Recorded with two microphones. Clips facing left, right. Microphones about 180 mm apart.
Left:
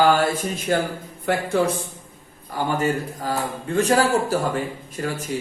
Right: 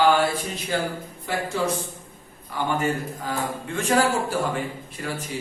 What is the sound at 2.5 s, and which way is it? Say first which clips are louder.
A man's voice: left 2 dB; 40° left (ahead or behind).